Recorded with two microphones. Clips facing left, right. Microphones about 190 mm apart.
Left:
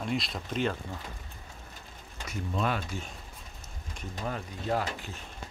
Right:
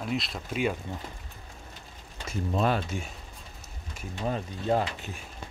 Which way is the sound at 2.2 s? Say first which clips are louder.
Right 4 dB; 35° right (ahead or behind).